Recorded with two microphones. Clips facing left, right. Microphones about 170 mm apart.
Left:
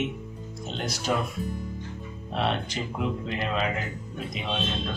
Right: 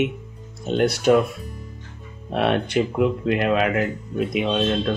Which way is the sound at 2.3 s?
60° right (ahead or behind).